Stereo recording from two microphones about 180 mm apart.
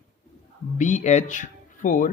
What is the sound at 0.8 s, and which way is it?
Speech, 40° left (ahead or behind).